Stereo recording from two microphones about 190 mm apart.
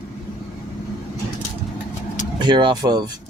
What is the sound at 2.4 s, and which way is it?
Speech, 25° right (ahead or behind).